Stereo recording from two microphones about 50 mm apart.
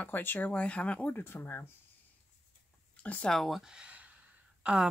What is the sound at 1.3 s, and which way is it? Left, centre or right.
Speech, left.